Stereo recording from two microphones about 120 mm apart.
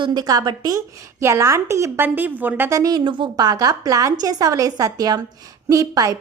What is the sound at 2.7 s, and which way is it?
A woman's voice, 35° right (ahead or behind).